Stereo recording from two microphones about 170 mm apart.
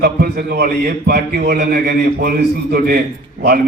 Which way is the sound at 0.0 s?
65° right (ahead or behind).